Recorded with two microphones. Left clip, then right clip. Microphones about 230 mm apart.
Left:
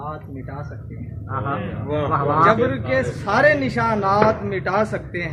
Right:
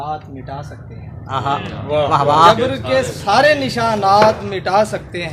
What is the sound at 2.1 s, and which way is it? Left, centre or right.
Speech, right.